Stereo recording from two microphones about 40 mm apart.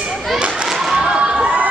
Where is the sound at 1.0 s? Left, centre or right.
Right.